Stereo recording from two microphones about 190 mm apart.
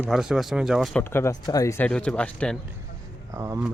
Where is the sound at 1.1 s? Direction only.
15° left (ahead or behind).